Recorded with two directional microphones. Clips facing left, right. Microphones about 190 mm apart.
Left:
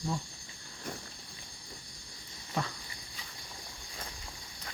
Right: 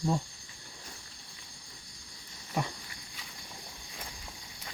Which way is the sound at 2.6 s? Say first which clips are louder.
Right 2 dB; 15° right (ahead or behind).